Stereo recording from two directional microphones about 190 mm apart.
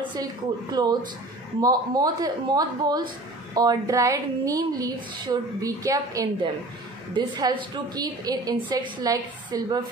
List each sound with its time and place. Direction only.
0.1 s a woman's voice: 20° right (ahead or behind)